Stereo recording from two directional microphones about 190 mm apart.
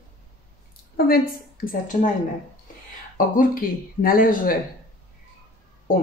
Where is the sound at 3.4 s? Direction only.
50° left (ahead or behind).